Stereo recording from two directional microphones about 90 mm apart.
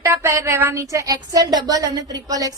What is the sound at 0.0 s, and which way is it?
A woman's voice, 30° right (ahead or behind).